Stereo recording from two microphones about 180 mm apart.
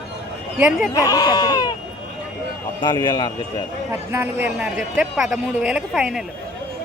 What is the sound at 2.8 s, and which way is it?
Speech, 25° left (ahead or behind).